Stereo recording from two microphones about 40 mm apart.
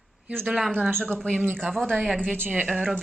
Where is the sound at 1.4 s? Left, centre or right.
Right.